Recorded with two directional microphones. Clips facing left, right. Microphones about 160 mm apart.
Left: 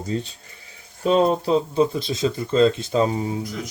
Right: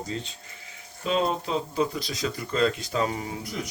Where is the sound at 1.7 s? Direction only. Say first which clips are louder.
Left 7 dB; 25° left (ahead or behind).